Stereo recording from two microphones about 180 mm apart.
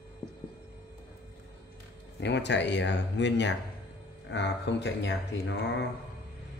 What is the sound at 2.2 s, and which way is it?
Speech, 75° left (ahead or behind).